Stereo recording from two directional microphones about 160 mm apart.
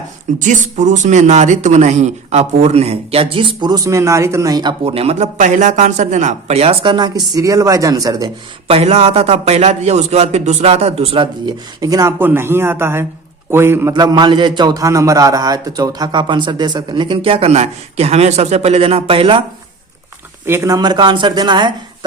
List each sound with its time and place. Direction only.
0.3 s a man's voice: 50° right (ahead or behind); by 4.7 s 20° right (ahead or behind)
4.8 s a man's voice: 35° right (ahead or behind)
8.6 s a man's voice: 40° right (ahead or behind); by 13.9 s 15° right (ahead or behind)
13.9 s a man's voice: 25° right (ahead or behind)
20.5 s a man's voice: 20° right (ahead or behind)